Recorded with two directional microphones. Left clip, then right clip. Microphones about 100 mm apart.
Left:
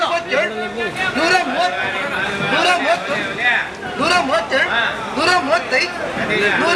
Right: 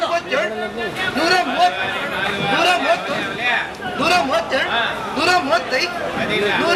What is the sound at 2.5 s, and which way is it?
Chatter, centre (ahead or behind).